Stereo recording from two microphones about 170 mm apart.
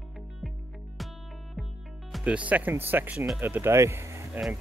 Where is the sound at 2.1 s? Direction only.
5° right (ahead or behind).